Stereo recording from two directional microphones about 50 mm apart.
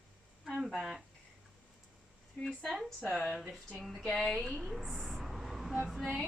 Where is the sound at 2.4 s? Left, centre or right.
Centre.